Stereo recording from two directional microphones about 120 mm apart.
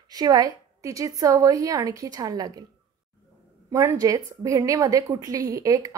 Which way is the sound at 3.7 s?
25° right (ahead or behind).